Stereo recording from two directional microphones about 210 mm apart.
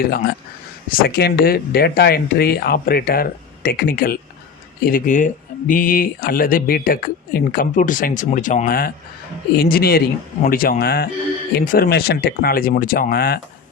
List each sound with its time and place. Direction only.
0.9 s speech: 50° left (ahead or behind)